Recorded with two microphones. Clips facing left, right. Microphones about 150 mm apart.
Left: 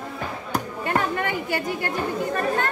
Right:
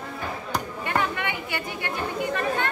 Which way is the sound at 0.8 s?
40° left (ahead or behind).